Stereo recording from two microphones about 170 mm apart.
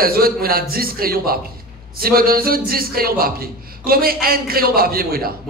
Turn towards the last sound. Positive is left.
turn(degrees=-60)  # may be behind; listen again after turning